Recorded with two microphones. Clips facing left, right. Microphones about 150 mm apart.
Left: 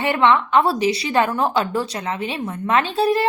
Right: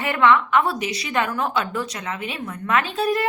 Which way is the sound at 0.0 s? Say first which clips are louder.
Left 1 dB; 25° left (ahead or behind).